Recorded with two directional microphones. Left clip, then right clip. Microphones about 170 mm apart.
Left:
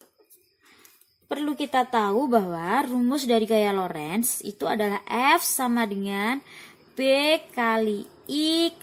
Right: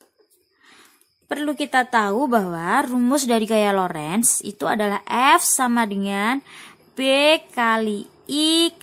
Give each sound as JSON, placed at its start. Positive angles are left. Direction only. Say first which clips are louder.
{"t": 1.3, "sound": "a woman's voice", "louder": "right 4 dB", "side_deg": -30}